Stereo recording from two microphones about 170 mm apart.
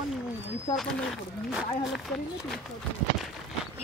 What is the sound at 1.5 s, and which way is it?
Speech, centre (ahead or behind).